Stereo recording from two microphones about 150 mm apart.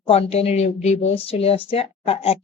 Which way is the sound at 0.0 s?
40° left (ahead or behind).